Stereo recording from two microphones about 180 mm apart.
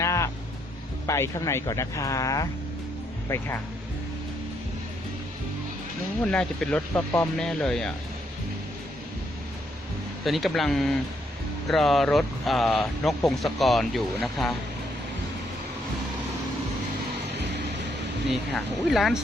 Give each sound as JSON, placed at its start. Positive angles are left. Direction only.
{"t": 0.0, "sound": "a sound", "side_deg": 15}
{"t": 1.0, "sound": "speech", "side_deg": 15}
{"t": 6.2, "sound": "speech", "side_deg": 5}
{"t": 10.2, "sound": "speech", "side_deg": 0}
{"t": 18.5, "sound": "speech", "side_deg": 0}